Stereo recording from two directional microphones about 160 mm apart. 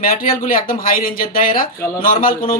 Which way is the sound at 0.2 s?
65° left (ahead or behind).